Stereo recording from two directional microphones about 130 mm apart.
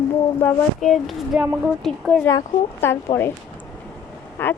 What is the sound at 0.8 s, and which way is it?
Speech, centre (ahead or behind).